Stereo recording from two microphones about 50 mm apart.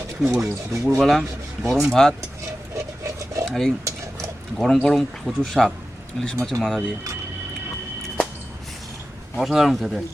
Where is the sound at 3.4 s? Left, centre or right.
Centre.